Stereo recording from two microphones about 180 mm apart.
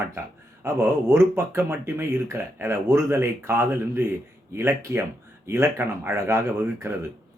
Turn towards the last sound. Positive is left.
turn(degrees=-15)  # may be behind; listen again after turning